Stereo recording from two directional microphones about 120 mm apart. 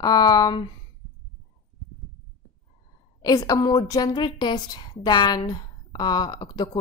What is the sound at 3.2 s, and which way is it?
Speech, 30° left (ahead or behind).